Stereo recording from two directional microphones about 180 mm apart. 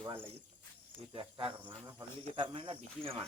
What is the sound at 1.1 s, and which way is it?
Speech, 30° right (ahead or behind).